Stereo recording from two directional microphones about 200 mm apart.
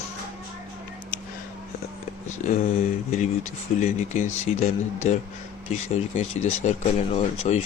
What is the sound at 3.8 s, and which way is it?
Speech, 35° left (ahead or behind).